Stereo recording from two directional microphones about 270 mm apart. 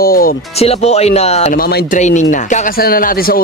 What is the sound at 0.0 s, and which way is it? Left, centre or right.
A man's voice, left.